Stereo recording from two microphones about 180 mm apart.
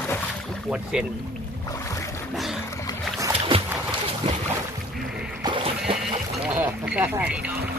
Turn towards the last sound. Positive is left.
turn(degrees=-5)  # may be behind; listen again after turning